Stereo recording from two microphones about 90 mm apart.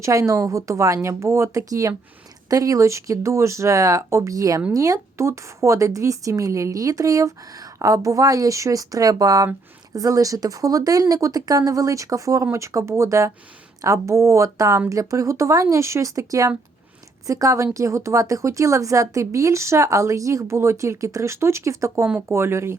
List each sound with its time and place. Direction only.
0.0 s speech: 35° right (ahead or behind)